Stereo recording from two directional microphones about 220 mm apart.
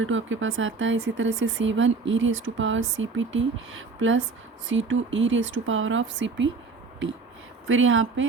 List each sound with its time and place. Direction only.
0.0 s speech: 60° right (ahead or behind)
7.7 s speech: 65° right (ahead or behind)